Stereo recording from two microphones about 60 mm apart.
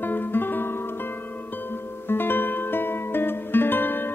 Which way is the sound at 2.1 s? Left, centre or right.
Left.